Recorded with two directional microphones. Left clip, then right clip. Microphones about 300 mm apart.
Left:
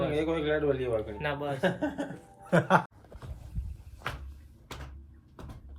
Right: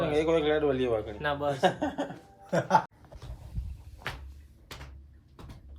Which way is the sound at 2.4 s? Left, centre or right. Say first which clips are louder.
Even; left.